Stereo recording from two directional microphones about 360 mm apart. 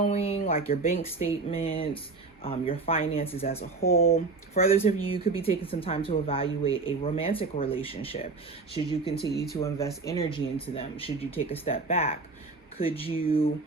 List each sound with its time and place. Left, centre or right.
0.0 s a sound: centre
0.7 s speech: left
9.1 s speech: left
9.6 s speech: centre